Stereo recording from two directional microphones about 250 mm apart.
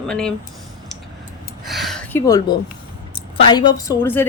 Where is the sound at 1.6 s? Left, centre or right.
Centre.